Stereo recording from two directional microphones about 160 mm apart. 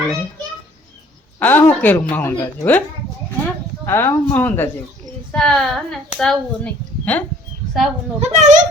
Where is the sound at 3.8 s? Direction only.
15° left (ahead or behind).